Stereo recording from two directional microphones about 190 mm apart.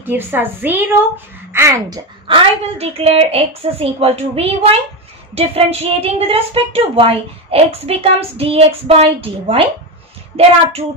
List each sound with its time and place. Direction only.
0.0 s a woman's voice: 10° right (ahead or behind); by 9.7 s 30° right (ahead or behind)